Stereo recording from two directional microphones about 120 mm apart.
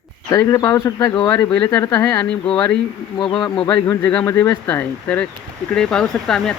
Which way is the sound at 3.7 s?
20° left (ahead or behind).